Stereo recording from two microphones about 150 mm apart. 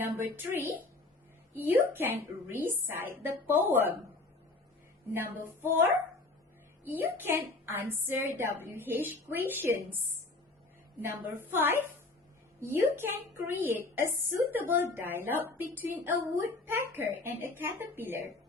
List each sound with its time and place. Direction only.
0.0 s speech: 15° right (ahead or behind)
5.1 s speech: 15° right (ahead or behind)
11.0 s speech: 15° right (ahead or behind)